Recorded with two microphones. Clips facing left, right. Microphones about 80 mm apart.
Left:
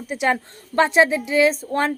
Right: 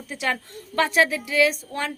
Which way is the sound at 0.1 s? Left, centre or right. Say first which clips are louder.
Left 6 dB; left.